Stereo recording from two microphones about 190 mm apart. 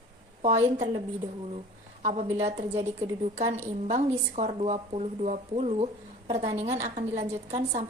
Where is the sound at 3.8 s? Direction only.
35° right (ahead or behind).